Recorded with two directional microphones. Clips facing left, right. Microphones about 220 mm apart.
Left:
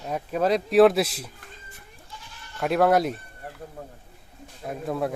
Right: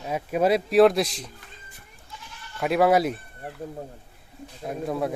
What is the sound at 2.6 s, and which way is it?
Speech, centre (ahead or behind).